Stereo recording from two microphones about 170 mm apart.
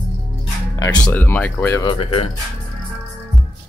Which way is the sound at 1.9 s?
35° left (ahead or behind).